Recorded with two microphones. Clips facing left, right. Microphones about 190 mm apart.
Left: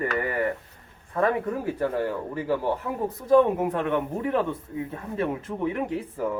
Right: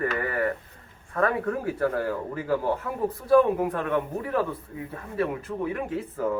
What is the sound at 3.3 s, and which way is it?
Speech, 20° left (ahead or behind).